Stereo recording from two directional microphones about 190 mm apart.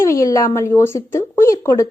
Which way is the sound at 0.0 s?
15° left (ahead or behind).